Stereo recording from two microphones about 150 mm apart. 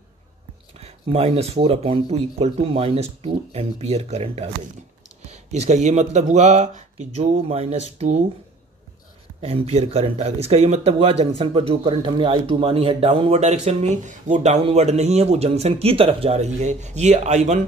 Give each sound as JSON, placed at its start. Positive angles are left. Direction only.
{"t": 0.7, "sound": "speech", "side_deg": -40}
{"t": 9.4, "sound": "speech", "side_deg": -45}